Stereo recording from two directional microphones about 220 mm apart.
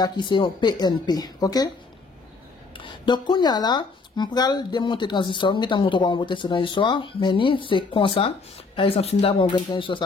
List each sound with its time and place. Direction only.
0.0 s speech: 20° left (ahead or behind)
2.8 s speech: 20° left (ahead or behind)